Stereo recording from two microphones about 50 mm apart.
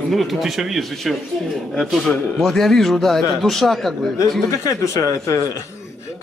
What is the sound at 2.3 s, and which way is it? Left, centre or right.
A man's voice, centre.